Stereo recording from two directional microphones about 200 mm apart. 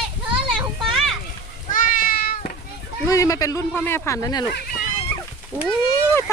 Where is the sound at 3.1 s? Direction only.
15° left (ahead or behind).